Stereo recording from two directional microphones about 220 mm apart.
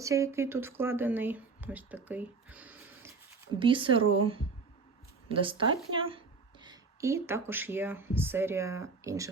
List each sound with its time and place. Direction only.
0.0 s speech: 15° right (ahead or behind)
2.0 s a sound: 5° right (ahead or behind)
3.6 s a woman's voice: 25° right (ahead or behind)